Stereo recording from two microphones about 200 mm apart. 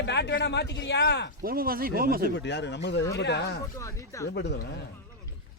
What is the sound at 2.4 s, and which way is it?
A man's voice, 60° left (ahead or behind).